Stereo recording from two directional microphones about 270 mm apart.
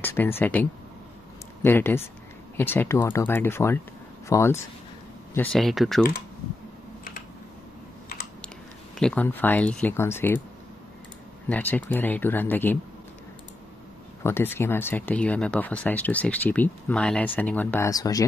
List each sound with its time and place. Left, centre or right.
0.0 s a sound: centre
0.4 s speech: centre
8.9 s speech: centre
11.4 s speech: centre
14.2 s speech: centre